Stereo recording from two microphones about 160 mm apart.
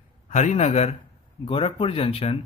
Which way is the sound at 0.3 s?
45° left (ahead or behind).